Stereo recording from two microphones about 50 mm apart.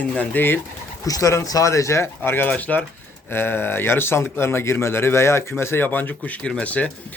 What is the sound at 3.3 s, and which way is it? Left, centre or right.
A man's voice, left.